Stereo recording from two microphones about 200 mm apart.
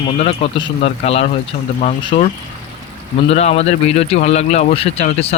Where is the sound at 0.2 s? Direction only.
30° left (ahead or behind).